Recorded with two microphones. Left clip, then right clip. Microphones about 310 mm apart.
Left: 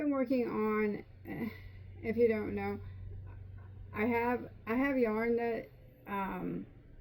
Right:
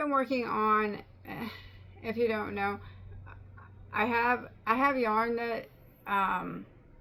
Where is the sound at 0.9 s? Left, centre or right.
Right.